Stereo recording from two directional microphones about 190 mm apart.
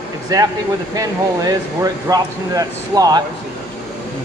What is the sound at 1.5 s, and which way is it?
Speech, 20° right (ahead or behind).